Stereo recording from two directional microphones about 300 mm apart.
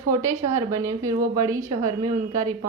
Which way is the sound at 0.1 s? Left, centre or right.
Centre.